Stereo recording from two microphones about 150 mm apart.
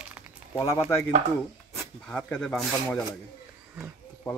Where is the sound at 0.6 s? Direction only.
20° left (ahead or behind).